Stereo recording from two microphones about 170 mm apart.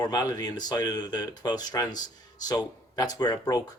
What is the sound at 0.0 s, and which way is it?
Speech, 20° left (ahead or behind).